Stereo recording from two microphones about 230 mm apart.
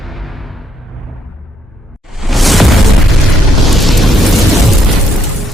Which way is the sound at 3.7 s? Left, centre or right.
Centre.